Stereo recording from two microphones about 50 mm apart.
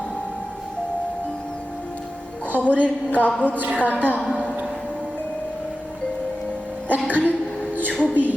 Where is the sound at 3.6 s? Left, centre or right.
Right.